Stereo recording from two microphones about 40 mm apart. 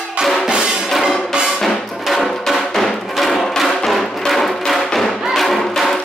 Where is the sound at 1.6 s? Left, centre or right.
Centre.